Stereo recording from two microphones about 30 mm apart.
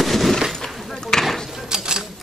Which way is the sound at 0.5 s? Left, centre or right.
Centre.